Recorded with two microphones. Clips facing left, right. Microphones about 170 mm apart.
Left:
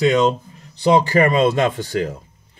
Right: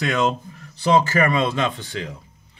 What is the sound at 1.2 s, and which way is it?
Speech, 40° left (ahead or behind).